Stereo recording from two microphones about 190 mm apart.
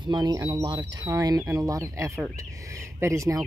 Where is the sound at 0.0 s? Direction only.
20° right (ahead or behind).